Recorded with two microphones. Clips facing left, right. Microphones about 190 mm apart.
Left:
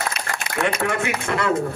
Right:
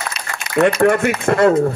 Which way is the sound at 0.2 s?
55° left (ahead or behind).